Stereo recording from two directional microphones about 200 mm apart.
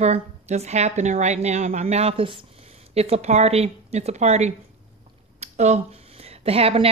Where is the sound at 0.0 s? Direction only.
35° right (ahead or behind).